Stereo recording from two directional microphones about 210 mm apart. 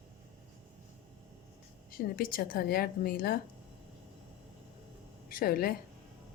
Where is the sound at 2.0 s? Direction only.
45° left (ahead or behind).